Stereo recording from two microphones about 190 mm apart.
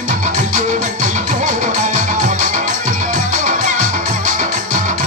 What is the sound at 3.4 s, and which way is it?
Music, 45° right (ahead or behind).